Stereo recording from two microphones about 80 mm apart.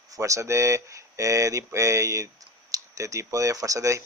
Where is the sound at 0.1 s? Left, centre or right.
Right.